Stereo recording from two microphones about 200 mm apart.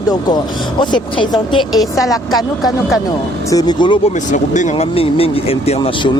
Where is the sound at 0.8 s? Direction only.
25° left (ahead or behind).